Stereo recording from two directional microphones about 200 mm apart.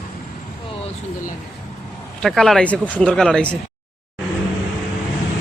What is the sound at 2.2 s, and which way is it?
Speech, centre (ahead or behind).